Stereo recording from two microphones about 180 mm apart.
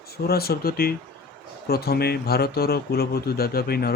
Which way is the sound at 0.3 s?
60° left (ahead or behind).